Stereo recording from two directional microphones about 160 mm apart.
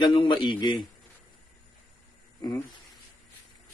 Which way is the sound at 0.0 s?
30° left (ahead or behind).